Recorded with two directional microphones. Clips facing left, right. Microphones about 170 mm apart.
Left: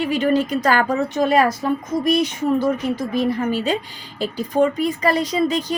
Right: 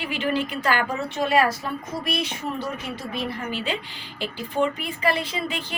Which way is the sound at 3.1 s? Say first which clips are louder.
Left 8 dB; 45° left (ahead or behind).